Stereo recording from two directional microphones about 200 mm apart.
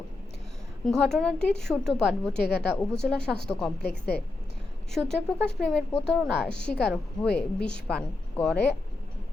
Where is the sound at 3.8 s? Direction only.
55° left (ahead or behind).